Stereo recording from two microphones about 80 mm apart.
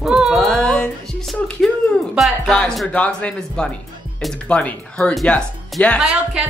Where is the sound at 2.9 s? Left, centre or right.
Centre.